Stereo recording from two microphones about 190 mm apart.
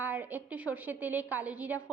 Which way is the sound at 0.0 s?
10° right (ahead or behind).